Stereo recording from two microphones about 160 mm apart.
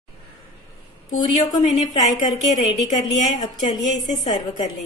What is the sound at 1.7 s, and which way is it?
A woman's voice, 50° left (ahead or behind).